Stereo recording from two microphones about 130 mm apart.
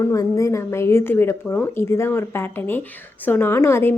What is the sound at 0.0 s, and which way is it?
A woman's voice, 25° left (ahead or behind).